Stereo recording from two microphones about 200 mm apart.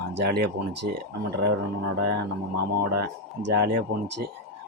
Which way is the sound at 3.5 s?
55° right (ahead or behind).